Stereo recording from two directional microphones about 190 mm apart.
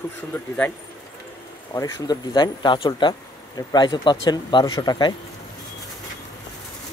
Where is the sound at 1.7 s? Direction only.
20° left (ahead or behind).